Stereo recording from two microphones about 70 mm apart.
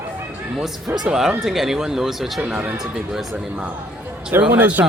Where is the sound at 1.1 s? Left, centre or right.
Centre.